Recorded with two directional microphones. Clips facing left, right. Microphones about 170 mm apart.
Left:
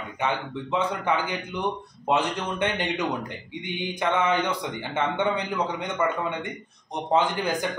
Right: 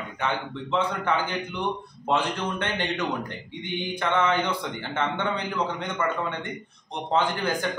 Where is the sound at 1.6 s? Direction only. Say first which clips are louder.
Left 1 dB; 15° left (ahead or behind).